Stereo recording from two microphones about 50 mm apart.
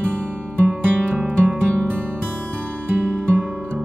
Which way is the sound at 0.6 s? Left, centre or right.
Centre.